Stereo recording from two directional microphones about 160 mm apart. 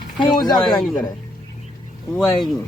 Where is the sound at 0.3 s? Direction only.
25° left (ahead or behind).